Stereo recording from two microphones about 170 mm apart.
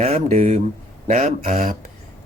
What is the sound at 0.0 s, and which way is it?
Speech, 40° right (ahead or behind).